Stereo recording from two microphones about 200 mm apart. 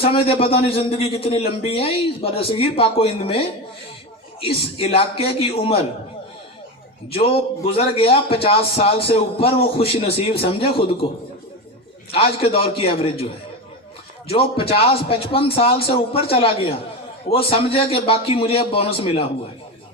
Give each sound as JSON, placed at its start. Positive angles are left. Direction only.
{"t": 0.0, "sound": "a man's voice", "side_deg": 25}
{"t": 7.1, "sound": "a man's voice", "side_deg": 30}
{"t": 12.1, "sound": "a man's voice", "side_deg": 30}
{"t": 14.3, "sound": "a man's voice", "side_deg": 30}